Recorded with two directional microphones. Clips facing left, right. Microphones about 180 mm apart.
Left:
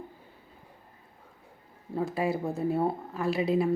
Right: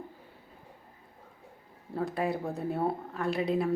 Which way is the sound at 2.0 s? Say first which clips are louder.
Left 2 dB; centre (ahead or behind).